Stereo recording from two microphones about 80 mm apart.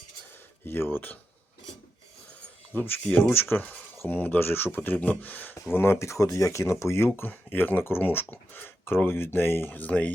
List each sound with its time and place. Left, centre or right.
0.6 s speech: left
2.7 s speech: left
5.7 s speech: left